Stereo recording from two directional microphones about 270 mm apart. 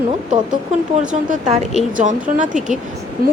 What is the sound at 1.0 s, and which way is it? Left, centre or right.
Speech, right.